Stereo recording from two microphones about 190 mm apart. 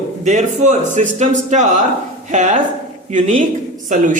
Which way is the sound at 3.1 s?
35° right (ahead or behind).